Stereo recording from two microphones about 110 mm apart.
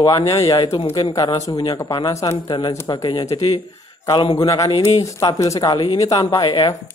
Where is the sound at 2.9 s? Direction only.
45° left (ahead or behind).